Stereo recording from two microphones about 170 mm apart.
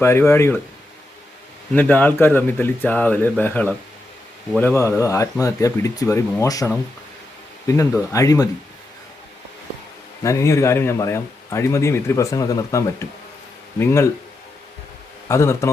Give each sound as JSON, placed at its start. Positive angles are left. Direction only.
{"t": 0.0, "sound": "a man's voice", "side_deg": 15}
{"t": 1.7, "sound": "a man's voice", "side_deg": 10}
{"t": 8.1, "sound": "speech", "side_deg": 20}
{"t": 10.2, "sound": "a man's voice", "side_deg": 15}
{"t": 15.3, "sound": "a man's voice", "side_deg": 15}